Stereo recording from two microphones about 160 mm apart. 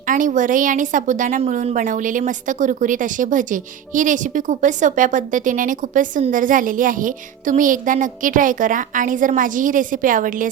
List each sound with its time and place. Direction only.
0.1 s a woman's voice: 55° right (ahead or behind)